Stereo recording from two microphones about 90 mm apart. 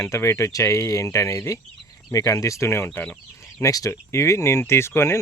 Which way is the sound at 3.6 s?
40° left (ahead or behind).